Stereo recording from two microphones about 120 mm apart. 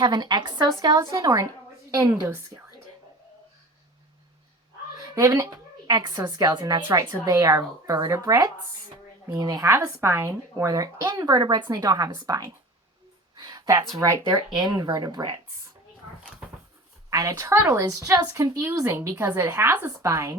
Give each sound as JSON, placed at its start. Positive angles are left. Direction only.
{"t": 0.0, "sound": "a woman's voice", "side_deg": -35}
{"t": 5.1, "sound": "a woman's voice", "side_deg": -25}
{"t": 9.6, "sound": "a woman's voice", "side_deg": -20}
{"t": 13.3, "sound": "a sound", "side_deg": -35}
{"t": 14.0, "sound": "a woman's voice", "side_deg": -25}
{"t": 17.1, "sound": "speech", "side_deg": -25}